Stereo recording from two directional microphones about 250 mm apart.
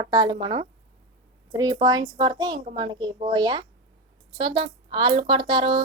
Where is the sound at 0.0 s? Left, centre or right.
Centre.